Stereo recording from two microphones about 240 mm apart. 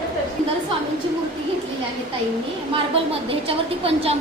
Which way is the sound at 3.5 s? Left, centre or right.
Right.